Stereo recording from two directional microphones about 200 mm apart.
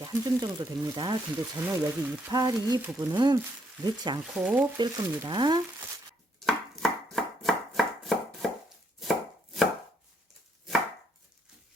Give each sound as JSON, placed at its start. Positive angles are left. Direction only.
{"t": 0.0, "sound": "speech", "side_deg": -20}
{"t": 2.3, "sound": "speech", "side_deg": -20}
{"t": 4.4, "sound": "speech", "side_deg": -5}
{"t": 6.4, "sound": "chopping", "side_deg": 0}